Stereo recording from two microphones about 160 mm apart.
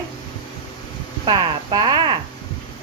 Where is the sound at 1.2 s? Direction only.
25° right (ahead or behind).